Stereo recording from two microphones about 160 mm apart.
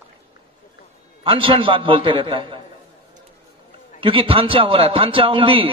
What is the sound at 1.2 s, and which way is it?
A man's voice, 35° right (ahead or behind).